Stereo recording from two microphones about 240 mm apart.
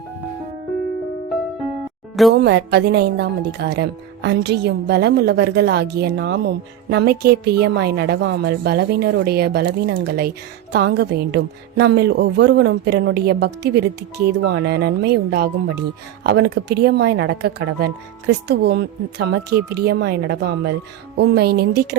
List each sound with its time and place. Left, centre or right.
2.3 s a woman's voice: right